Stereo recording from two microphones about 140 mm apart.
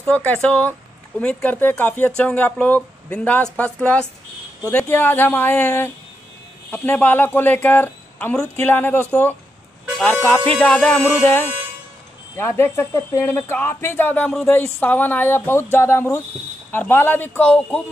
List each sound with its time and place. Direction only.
0.1 s speech: 10° left (ahead or behind)
10.2 s speech: 10° left (ahead or behind)
12.4 s speech: 15° left (ahead or behind)